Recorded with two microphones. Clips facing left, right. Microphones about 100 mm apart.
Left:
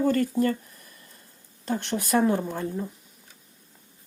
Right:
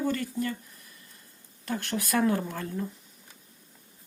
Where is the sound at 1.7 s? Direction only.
25° left (ahead or behind).